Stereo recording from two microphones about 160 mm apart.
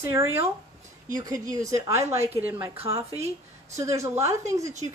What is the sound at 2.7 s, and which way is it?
Speech, 35° right (ahead or behind).